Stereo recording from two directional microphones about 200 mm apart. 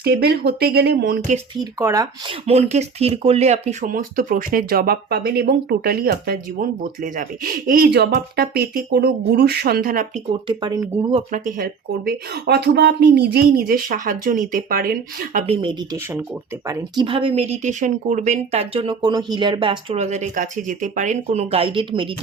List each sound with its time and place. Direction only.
0.0 s speech: 50° right (ahead or behind)
1.8 s speech: 15° right (ahead or behind)
2.5 s speech: 35° right (ahead or behind)
10.4 s speech: 25° right (ahead or behind)
11.1 s speech: 40° right (ahead or behind)
15.4 s speech: 25° right (ahead or behind)